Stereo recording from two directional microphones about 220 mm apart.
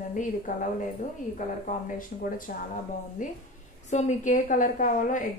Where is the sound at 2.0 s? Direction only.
40° left (ahead or behind).